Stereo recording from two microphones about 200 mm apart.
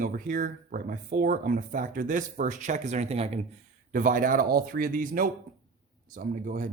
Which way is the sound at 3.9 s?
40° right (ahead or behind).